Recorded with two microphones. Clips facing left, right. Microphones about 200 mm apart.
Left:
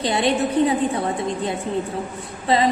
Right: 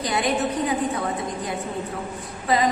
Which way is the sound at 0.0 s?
30° left (ahead or behind).